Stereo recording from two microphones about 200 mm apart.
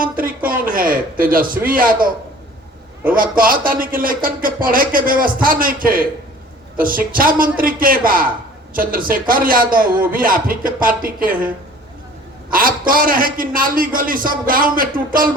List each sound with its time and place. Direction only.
0.0 s a sound: 45° right (ahead or behind)
0.7 s a man's voice: 45° right (ahead or behind)
3.2 s speech: 45° right (ahead or behind)
12.5 s speech: 45° right (ahead or behind)